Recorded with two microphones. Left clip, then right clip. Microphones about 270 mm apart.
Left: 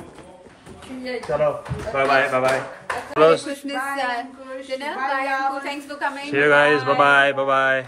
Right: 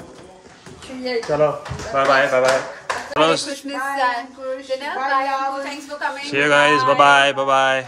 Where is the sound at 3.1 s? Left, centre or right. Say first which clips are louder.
Left 2 dB; centre.